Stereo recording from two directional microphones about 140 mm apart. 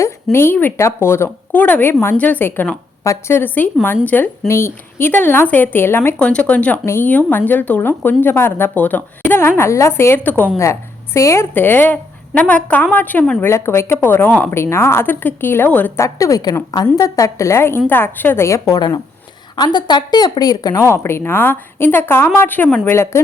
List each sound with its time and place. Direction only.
0.0 s a woman's voice: 20° left (ahead or behind)